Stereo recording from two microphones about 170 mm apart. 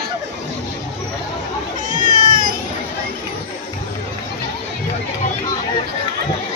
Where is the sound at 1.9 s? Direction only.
50° right (ahead or behind).